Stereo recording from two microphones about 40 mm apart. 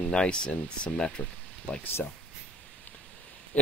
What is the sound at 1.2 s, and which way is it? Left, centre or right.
Speech, left.